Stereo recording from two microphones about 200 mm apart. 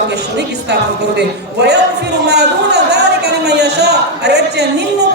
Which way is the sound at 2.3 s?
55° right (ahead or behind).